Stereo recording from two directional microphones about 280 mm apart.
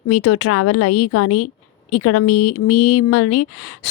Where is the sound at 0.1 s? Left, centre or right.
Left.